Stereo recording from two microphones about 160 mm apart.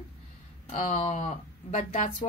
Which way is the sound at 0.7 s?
45° left (ahead or behind).